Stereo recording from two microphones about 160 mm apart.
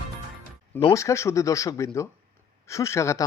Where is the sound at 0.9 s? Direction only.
20° left (ahead or behind).